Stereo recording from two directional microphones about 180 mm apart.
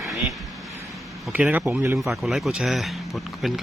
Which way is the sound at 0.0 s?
Centre (ahead or behind).